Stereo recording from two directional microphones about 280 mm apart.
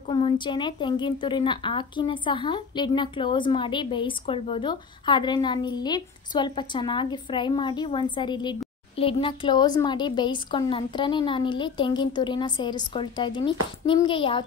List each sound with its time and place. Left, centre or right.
0.1 s a woman's voice: centre